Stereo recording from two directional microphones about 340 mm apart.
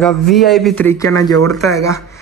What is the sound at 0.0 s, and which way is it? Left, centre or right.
Speech, centre.